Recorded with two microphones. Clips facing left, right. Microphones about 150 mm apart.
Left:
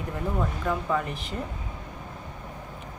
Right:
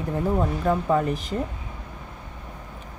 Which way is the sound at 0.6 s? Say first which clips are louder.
Right 7 dB; 40° right (ahead or behind).